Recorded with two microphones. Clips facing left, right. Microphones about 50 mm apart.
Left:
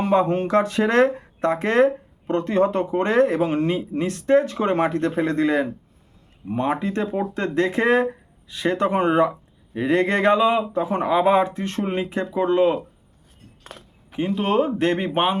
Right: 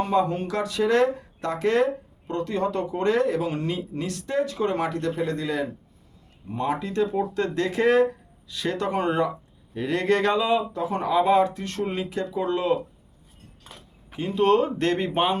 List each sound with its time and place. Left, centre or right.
0.1 s speech: left
14.1 s speech: left